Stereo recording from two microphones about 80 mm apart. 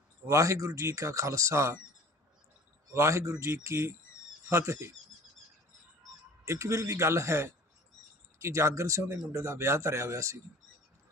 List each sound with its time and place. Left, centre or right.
0.3 s speech: right
2.9 s speech: right
6.4 s speech: right